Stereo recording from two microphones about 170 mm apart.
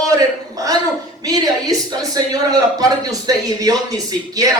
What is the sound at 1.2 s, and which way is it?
Speech, 20° right (ahead or behind).